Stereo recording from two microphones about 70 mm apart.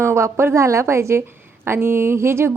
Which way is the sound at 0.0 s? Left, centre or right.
Right.